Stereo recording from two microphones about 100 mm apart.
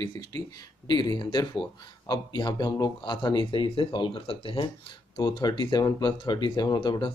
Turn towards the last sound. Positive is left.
turn(degrees=50)  # may be behind; listen again after turning